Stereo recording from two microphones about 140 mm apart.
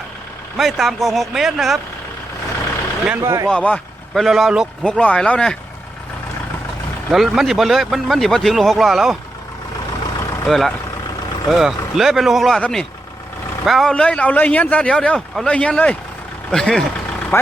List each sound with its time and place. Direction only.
0.5 s speech: centre (ahead or behind)
3.1 s speech: 20° right (ahead or behind)
3.5 s speech: 5° left (ahead or behind)
4.9 s a man's voice: 5° left (ahead or behind)
7.1 s speech: centre (ahead or behind)
10.4 s a man's voice: centre (ahead or behind)
17.3 s speech: 20° left (ahead or behind)